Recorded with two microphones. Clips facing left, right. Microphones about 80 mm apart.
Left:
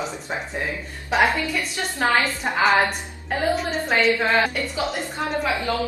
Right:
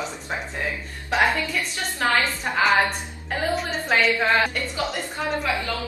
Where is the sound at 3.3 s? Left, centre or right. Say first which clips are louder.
Left 2 dB; centre.